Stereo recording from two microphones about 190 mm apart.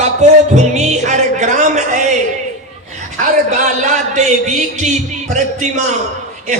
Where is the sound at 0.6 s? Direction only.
35° right (ahead or behind).